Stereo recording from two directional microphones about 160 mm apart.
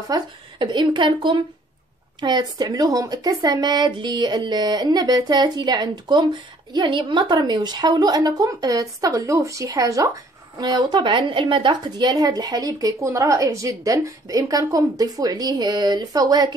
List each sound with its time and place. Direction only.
0.1 s a woman's voice: 30° right (ahead or behind)